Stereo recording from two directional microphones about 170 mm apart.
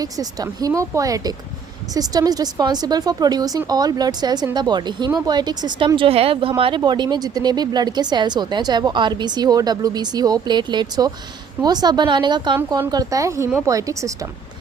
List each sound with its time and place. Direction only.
0.0 s speech: 20° right (ahead or behind)
12.5 s a woman's voice: 10° right (ahead or behind)